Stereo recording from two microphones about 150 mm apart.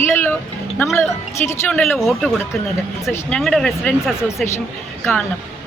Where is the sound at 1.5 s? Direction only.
15° left (ahead or behind).